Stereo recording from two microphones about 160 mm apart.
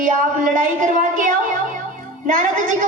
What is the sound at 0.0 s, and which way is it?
A woman's voice, 60° right (ahead or behind).